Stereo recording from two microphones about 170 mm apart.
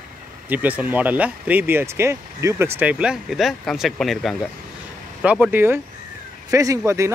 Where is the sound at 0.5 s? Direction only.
10° right (ahead or behind).